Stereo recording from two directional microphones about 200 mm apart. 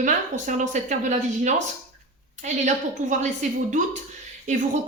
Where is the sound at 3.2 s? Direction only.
35° right (ahead or behind).